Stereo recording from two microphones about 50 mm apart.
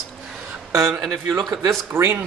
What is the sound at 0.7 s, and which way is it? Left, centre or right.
Speech, right.